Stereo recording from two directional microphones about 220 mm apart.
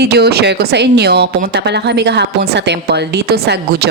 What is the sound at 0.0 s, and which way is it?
A woman's voice, 50° right (ahead or behind).